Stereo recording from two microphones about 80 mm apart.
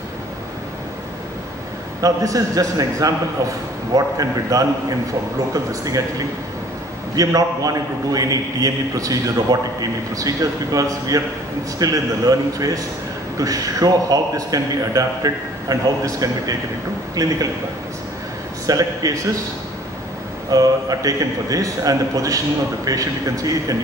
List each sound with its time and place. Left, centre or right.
2.0 s a man's voice: right
18.7 s a man's voice: right
20.5 s a man's voice: right